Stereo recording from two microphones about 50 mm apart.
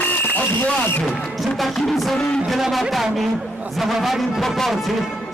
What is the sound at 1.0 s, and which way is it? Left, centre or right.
A man's voice, centre.